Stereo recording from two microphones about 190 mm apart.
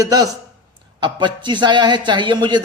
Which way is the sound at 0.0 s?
20° right (ahead or behind).